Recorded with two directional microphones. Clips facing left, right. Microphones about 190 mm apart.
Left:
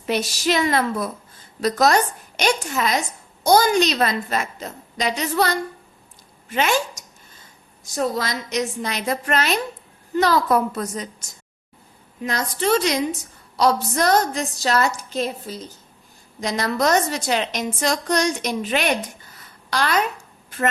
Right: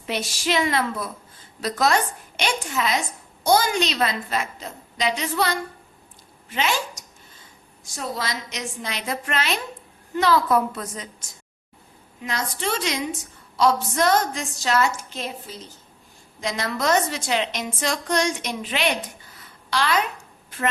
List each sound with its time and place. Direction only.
0.1 s a woman's voice: 40° left (ahead or behind)